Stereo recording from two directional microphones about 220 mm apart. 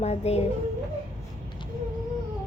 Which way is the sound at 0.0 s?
30° left (ahead or behind).